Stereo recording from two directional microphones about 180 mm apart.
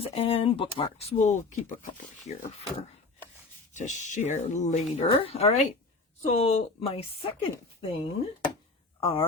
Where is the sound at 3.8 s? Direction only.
45° left (ahead or behind).